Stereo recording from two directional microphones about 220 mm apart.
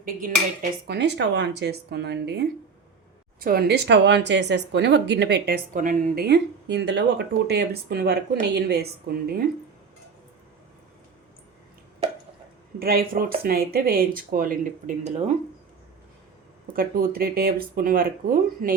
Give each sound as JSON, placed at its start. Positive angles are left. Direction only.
{"t": 0.0, "sound": "speech", "side_deg": -40}
{"t": 12.8, "sound": "speech", "side_deg": -45}
{"t": 16.7, "sound": "speech", "side_deg": -40}